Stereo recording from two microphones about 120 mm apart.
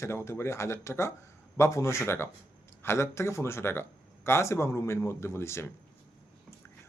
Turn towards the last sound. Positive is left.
turn(degrees=20)  # may be behind; listen again after turning